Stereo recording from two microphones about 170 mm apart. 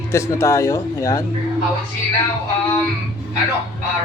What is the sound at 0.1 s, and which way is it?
Speech, 15° left (ahead or behind).